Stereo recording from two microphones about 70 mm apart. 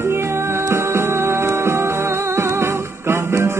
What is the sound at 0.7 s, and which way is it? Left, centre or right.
Music, right.